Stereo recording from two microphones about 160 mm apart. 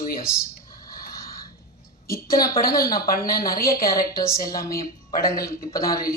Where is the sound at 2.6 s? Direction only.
65° left (ahead or behind).